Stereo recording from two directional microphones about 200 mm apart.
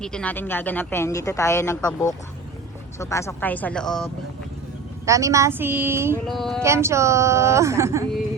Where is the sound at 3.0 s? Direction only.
15° left (ahead or behind).